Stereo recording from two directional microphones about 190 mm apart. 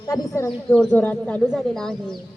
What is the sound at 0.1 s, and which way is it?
Speech, 15° left (ahead or behind).